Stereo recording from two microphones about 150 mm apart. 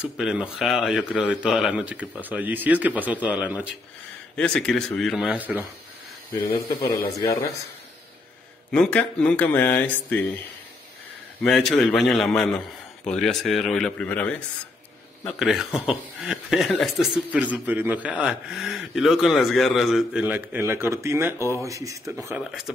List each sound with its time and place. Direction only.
0.0 s speech: 5° right (ahead or behind)
4.4 s speech: 5° left (ahead or behind); by 5.7 s 10° right (ahead or behind)
6.5 s speech: 90° left
8.7 s speech: 5° left (ahead or behind)
11.4 s speech: centre (ahead or behind)
15.3 s speech: 5° right (ahead or behind); by 22.1 s 20° right (ahead or behind)
22.4 s speech: centre (ahead or behind)